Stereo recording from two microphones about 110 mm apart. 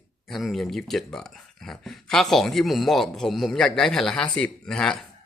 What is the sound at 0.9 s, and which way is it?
Speech, 5° left (ahead or behind).